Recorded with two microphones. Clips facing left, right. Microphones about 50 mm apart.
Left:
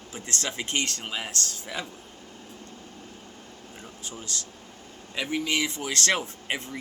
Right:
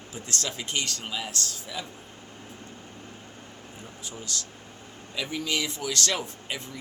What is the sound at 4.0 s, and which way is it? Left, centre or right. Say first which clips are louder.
A man's voice: right 1 dB; left.